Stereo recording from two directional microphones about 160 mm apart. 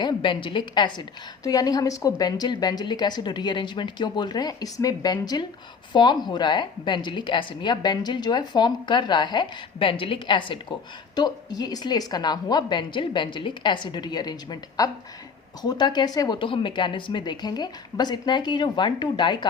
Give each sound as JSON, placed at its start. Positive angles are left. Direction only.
{"t": 0.0, "sound": "a woman's voice", "side_deg": 30}